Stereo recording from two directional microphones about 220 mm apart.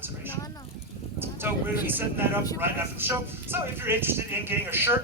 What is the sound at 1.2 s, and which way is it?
A man's voice, 10° right (ahead or behind).